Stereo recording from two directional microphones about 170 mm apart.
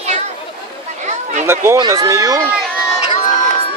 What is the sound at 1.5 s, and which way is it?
Speech, 15° right (ahead or behind).